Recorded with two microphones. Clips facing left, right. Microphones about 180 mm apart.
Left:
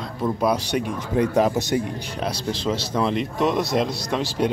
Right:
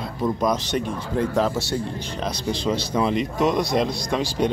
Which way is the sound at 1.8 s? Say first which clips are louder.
Left 1 dB; 5° left (ahead or behind).